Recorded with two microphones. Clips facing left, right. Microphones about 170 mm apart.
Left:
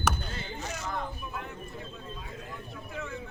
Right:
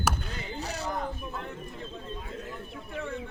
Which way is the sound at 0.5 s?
35° right (ahead or behind).